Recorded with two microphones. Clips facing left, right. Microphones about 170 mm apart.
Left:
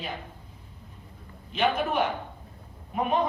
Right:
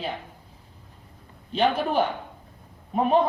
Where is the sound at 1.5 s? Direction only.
30° right (ahead or behind).